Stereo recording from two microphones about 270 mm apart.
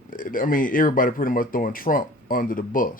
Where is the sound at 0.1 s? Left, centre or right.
Left.